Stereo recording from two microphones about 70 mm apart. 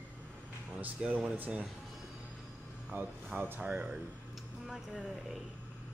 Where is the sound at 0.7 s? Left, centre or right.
Centre.